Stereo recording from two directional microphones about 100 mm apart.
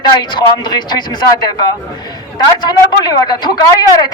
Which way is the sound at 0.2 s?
50° left (ahead or behind).